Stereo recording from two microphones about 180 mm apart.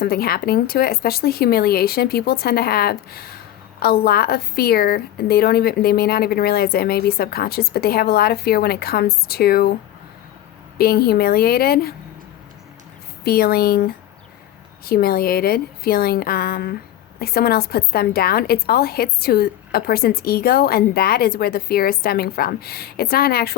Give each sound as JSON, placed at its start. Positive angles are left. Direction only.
{"t": 0.0, "sound": "speech", "side_deg": 55}
{"t": 10.8, "sound": "speech", "side_deg": 60}
{"t": 13.2, "sound": "speech", "side_deg": 60}